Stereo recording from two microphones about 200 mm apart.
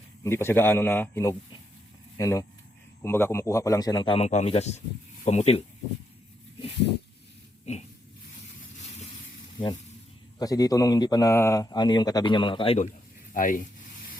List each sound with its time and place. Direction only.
0.2 s speech: 10° left (ahead or behind); by 5.6 s 30° left (ahead or behind)
7.6 s pig: 35° left (ahead or behind)
8.7 s vehicle: 35° left (ahead or behind)
9.6 s speech: 25° left (ahead or behind)
13.3 s speech: 45° left (ahead or behind)